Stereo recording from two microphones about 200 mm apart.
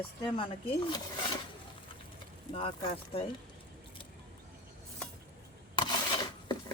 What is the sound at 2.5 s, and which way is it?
Speech, 30° left (ahead or behind).